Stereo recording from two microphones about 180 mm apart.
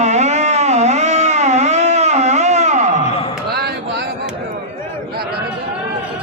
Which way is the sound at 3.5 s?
60° right (ahead or behind).